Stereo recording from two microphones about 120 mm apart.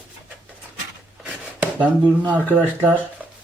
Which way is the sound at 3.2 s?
10° right (ahead or behind).